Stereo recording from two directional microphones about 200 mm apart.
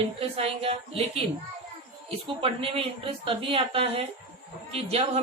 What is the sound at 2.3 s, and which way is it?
A man's voice, 30° right (ahead or behind).